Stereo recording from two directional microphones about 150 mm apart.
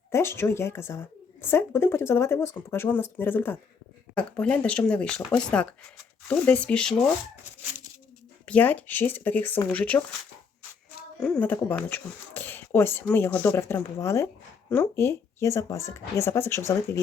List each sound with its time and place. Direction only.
0.1 s a woman's voice: 15° left (ahead or behind)
8.4 s a woman's voice: 10° left (ahead or behind)
11.2 s a woman's voice: 10° left (ahead or behind)